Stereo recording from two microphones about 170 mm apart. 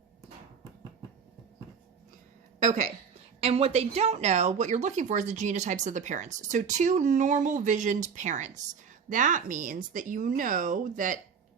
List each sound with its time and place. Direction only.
2.6 s a woman's voice: 45° right (ahead or behind)